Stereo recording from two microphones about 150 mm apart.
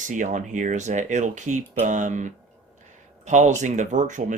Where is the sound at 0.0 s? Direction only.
60° right (ahead or behind).